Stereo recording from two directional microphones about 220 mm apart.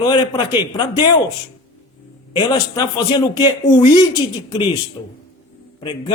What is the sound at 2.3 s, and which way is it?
A man's voice, 20° left (ahead or behind).